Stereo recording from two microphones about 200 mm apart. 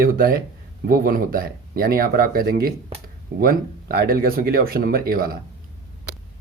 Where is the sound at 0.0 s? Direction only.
45° right (ahead or behind).